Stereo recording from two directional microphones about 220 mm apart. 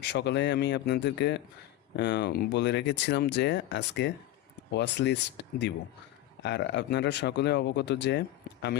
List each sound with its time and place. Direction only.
0.0 s speech: 50° left (ahead or behind)